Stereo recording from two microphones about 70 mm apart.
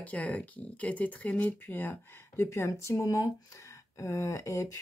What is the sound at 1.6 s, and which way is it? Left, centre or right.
Speech, left.